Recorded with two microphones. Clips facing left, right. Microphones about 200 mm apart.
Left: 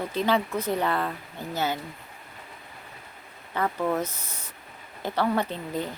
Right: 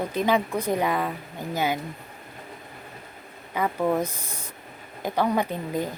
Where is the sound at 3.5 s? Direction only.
10° right (ahead or behind).